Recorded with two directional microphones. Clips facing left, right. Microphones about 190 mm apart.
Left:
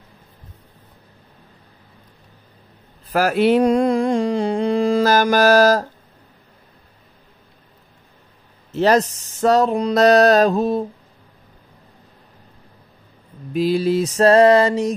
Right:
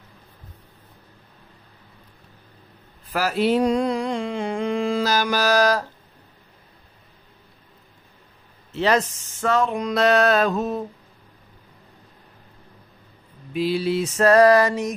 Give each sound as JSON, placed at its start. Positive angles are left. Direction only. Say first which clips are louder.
{"t": 3.1, "sound": "mantra", "louder": "left 5 dB", "side_deg": 50}
{"t": 8.7, "sound": "speech", "louder": "left 5 dB", "side_deg": 40}
{"t": 13.5, "sound": "speech", "louder": "left 4 dB", "side_deg": 45}